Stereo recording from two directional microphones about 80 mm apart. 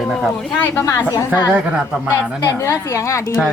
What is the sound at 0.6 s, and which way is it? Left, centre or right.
Speech, left.